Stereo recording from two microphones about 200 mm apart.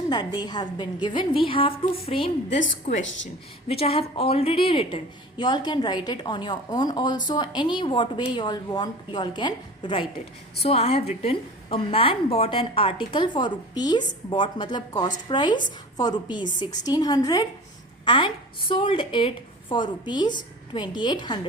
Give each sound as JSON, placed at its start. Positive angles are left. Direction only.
{"t": 0.1, "sound": "a woman's voice", "side_deg": 20}
{"t": 2.6, "sound": "a woman's voice", "side_deg": 40}
{"t": 3.0, "sound": "a woman's voice", "side_deg": 70}
{"t": 3.7, "sound": "a woman's voice", "side_deg": 30}